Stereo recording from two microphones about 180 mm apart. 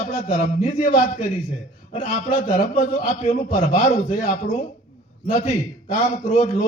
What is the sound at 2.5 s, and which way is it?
A man's voice, 45° left (ahead or behind).